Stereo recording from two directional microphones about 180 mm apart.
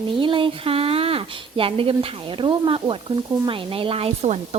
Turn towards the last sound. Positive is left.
turn(degrees=-35)  # may be behind; listen again after turning